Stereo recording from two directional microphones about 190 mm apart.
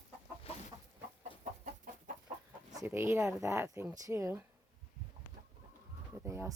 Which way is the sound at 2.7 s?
15° right (ahead or behind).